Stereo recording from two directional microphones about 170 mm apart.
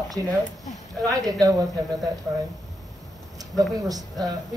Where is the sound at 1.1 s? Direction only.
20° right (ahead or behind).